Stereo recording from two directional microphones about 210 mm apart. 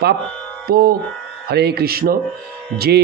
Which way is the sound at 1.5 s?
50° right (ahead or behind).